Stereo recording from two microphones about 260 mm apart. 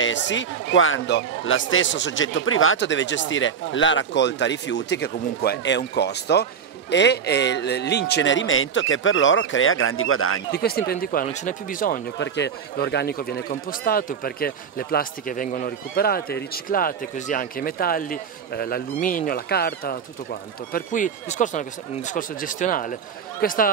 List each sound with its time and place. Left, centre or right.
0.0 s a man's voice: left
10.5 s speech: left